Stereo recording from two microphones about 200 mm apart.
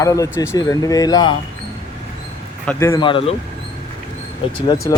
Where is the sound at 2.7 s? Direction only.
15° left (ahead or behind).